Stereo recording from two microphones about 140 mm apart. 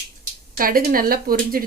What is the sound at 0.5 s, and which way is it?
Speech, 90° right.